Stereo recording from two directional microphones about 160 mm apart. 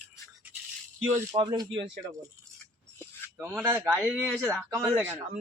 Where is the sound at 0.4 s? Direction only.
10° right (ahead or behind).